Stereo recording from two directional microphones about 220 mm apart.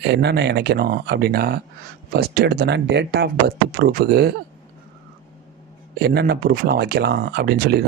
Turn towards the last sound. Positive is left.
turn(degrees=-45)  # may be behind; listen again after turning